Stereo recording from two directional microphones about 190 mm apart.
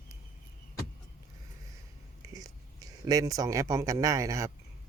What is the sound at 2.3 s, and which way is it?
Speech, 20° right (ahead or behind).